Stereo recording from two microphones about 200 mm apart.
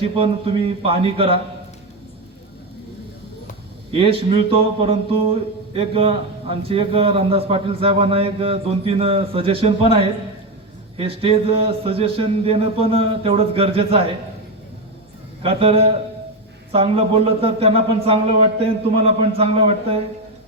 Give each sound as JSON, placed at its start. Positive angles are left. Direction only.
{"t": 0.0, "sound": "a man's voice", "side_deg": -25}
{"t": 4.2, "sound": "a man's voice", "side_deg": -25}
{"t": 15.4, "sound": "a man's voice", "side_deg": -30}